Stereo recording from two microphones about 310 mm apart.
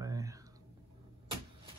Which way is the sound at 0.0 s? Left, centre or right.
Centre.